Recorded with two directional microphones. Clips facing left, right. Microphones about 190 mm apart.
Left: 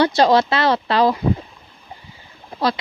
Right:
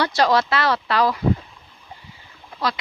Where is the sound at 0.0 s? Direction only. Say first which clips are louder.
Left 4 dB; 25° left (ahead or behind).